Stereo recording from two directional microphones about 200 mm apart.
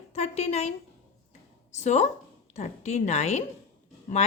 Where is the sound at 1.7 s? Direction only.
35° left (ahead or behind).